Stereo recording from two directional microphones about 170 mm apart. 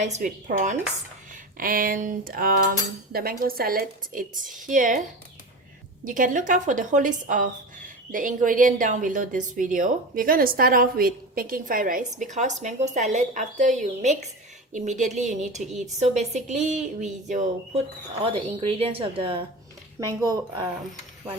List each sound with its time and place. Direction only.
0.0 s a woman's voice: 45° right (ahead or behind)
6.1 s a woman's voice: 50° right (ahead or behind)
18.2 s a woman's voice: 30° right (ahead or behind)